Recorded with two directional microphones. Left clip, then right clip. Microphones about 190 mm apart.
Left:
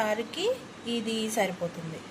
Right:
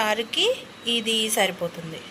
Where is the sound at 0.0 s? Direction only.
Centre (ahead or behind).